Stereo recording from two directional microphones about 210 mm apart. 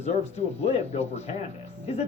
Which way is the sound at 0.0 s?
30° left (ahead or behind).